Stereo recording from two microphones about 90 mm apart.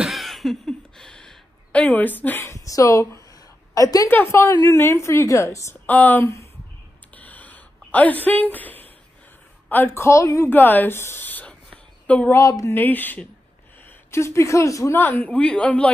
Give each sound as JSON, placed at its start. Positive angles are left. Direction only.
{"t": 0.0, "sound": "a sound", "side_deg": 0}
{"t": 2.5, "sound": "a woman's voice", "side_deg": 35}
{"t": 4.1, "sound": "a woman's voice", "side_deg": 25}
{"t": 5.9, "sound": "speech", "side_deg": 20}
{"t": 7.2, "sound": "a sound", "side_deg": 15}
{"t": 9.7, "sound": "speech", "side_deg": 25}
{"t": 12.3, "sound": "a woman's voice", "side_deg": 35}
{"t": 12.7, "sound": "speech", "side_deg": 20}
{"t": 14.1, "sound": "a woman's voice", "side_deg": 30}
{"t": 15.0, "sound": "speech", "side_deg": 20}